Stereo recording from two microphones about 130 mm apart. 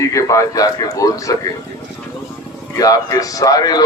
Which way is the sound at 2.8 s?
25° left (ahead or behind).